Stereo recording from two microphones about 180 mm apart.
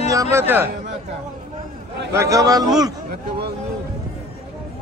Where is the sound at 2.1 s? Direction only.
15° right (ahead or behind).